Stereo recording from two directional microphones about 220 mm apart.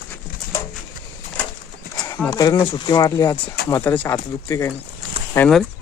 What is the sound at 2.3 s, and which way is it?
Speech, 15° left (ahead or behind).